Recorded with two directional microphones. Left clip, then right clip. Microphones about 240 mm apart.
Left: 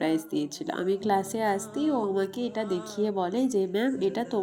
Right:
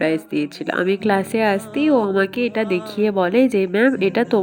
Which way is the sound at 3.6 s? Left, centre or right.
Right.